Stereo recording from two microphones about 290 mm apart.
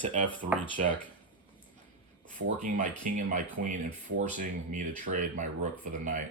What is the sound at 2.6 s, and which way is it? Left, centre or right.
Speech, right.